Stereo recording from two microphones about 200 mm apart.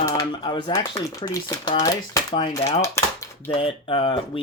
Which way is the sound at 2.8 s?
15° left (ahead or behind).